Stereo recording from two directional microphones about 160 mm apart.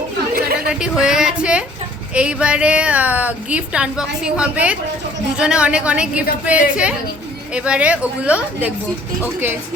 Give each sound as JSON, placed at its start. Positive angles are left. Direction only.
{"t": 0.3, "sound": "chatter", "side_deg": -75}
{"t": 0.7, "sound": "a woman's voice", "side_deg": -5}